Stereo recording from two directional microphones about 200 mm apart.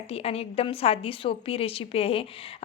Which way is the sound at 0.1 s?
30° left (ahead or behind).